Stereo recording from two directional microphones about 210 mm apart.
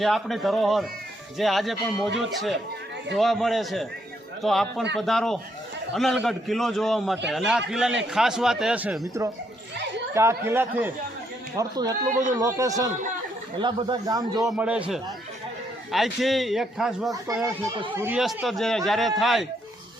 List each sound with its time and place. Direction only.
0.0 s a man's voice: centre (ahead or behind)
10.2 s a man's voice: 10° right (ahead or behind)
14.5 s a man's voice: 5° right (ahead or behind)
17.4 s a man's voice: 25° right (ahead or behind)
18.0 s a man's voice: 5° right (ahead or behind)